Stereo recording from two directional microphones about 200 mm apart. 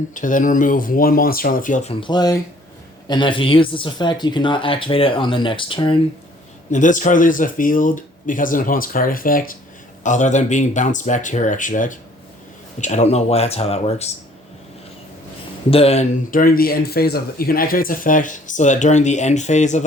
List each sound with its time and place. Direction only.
0.1 s speech: 40° left (ahead or behind); by 6.0 s 25° left (ahead or behind)
6.7 s speech: 40° left (ahead or behind)
15.7 s speech: 30° left (ahead or behind)